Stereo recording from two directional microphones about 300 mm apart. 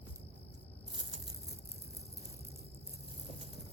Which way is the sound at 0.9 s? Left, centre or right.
Centre.